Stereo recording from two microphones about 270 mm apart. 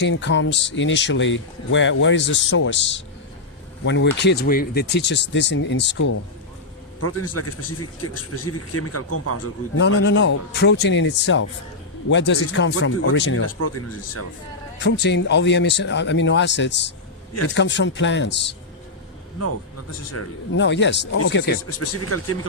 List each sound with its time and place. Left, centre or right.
0.0 s speech: left
7.0 s a man's voice: left
9.8 s speech: left
13.4 s a man's voice: left
14.8 s speech: left
20.1 s speech: left
21.8 s a man's voice: left